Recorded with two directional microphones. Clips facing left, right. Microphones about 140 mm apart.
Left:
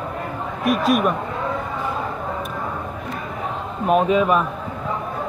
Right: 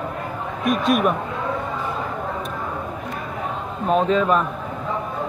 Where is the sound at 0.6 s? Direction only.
Centre (ahead or behind).